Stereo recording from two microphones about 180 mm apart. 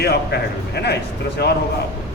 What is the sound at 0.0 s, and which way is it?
Speech, 60° left (ahead or behind).